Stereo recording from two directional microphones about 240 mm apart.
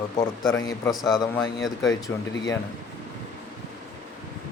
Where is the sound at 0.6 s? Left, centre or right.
Centre.